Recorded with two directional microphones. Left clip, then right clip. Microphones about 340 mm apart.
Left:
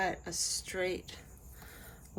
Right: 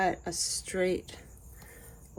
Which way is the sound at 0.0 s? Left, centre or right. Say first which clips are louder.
Right 4 dB; centre.